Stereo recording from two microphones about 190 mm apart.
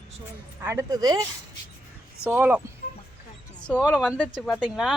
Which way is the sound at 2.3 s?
10° right (ahead or behind).